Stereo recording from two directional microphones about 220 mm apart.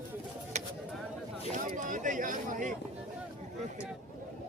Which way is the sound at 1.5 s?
35° right (ahead or behind).